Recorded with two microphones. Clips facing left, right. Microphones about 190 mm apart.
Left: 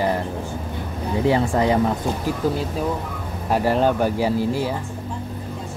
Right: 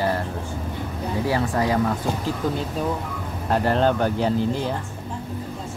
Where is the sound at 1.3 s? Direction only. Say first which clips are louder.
Left 4 dB; 25° left (ahead or behind).